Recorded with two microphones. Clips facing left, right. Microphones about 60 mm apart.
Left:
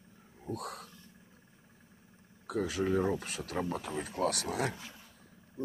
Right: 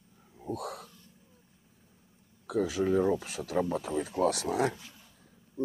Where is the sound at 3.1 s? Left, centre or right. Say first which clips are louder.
Right 5 dB; left.